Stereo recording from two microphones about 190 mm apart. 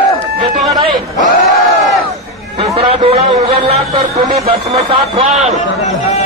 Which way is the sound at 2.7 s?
30° right (ahead or behind).